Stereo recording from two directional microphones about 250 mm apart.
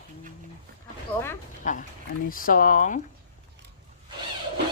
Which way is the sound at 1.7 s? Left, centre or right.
Left.